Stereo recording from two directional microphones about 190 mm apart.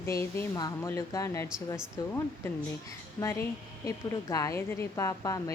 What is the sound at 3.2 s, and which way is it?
A woman's voice, 15° left (ahead or behind).